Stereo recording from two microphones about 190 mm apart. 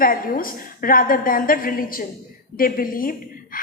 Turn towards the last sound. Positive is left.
turn(degrees=50)  # may be behind; listen again after turning